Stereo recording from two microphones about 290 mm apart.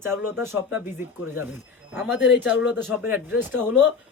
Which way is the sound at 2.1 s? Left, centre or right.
Left.